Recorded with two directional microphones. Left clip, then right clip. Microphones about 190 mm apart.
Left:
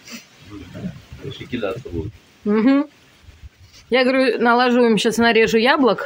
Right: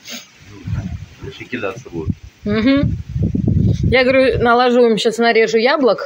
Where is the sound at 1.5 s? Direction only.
5° left (ahead or behind).